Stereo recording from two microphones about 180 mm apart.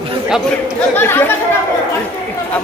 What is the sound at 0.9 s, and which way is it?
Speech, 10° left (ahead or behind).